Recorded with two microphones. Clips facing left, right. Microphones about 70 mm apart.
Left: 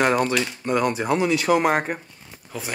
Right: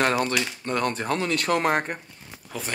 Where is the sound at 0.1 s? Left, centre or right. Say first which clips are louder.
Left 3 dB; centre.